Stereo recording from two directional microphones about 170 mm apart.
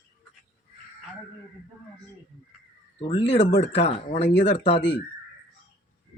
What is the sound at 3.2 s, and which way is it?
Speech, 90° left.